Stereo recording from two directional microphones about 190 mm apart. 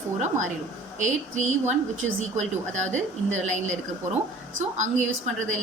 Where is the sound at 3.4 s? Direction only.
40° right (ahead or behind).